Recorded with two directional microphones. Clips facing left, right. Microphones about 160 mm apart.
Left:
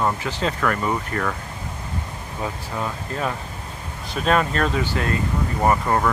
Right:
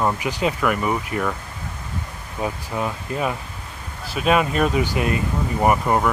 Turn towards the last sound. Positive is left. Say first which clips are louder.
# right 1 dB
turn(degrees=-10)  # may be behind; listen again after turning